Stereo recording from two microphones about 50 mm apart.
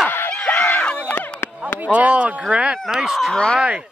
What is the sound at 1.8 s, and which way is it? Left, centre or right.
Speech, right.